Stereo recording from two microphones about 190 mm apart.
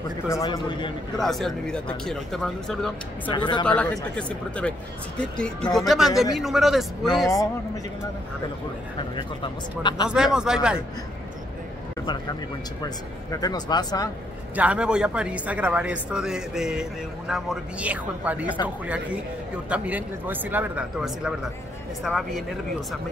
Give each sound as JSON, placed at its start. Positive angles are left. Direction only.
{"t": 0.3, "sound": "speech", "side_deg": 20}
{"t": 1.1, "sound": "speech", "side_deg": 0}
{"t": 3.3, "sound": "speech", "side_deg": 25}
{"t": 3.6, "sound": "speech", "side_deg": 5}
{"t": 7.2, "sound": "speech", "side_deg": 15}
{"t": 9.1, "sound": "speech", "side_deg": 25}
{"t": 10.0, "sound": "speech", "side_deg": -5}
{"t": 12.8, "sound": "speech", "side_deg": 20}
{"t": 14.5, "sound": "a man's voice", "side_deg": -5}
{"t": 19.7, "sound": "a man's voice", "side_deg": -5}